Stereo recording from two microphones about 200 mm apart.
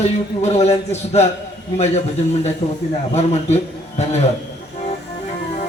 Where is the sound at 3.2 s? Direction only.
30° left (ahead or behind).